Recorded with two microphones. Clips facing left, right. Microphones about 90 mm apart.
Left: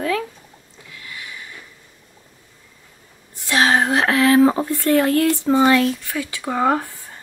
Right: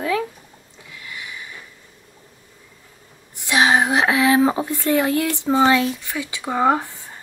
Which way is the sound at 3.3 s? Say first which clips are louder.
Even; 15° right (ahead or behind).